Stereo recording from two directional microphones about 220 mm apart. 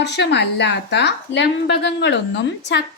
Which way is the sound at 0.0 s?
50° left (ahead or behind).